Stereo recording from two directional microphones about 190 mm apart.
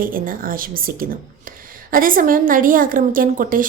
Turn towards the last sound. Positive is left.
turn(degrees=-45)  # may be behind; listen again after turning